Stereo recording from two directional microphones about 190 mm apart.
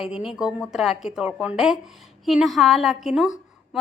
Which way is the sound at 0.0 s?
5° right (ahead or behind).